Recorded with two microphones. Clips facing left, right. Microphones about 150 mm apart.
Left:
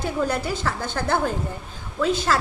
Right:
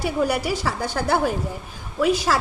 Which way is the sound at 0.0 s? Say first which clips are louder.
Right 2 dB; 10° right (ahead or behind).